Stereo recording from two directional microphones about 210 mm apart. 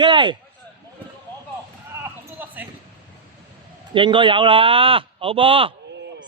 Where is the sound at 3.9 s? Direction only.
25° right (ahead or behind).